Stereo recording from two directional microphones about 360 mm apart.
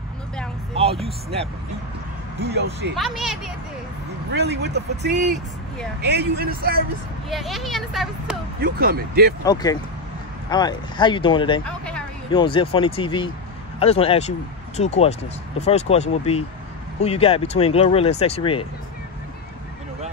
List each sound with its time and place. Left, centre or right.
1.0 s speech: centre
2.4 s speech: right
3.0 s speech: centre
4.3 s speech: right
7.2 s speech: centre
8.6 s speech: right
9.4 s speech: centre
11.6 s a sound: centre
12.3 s speech: centre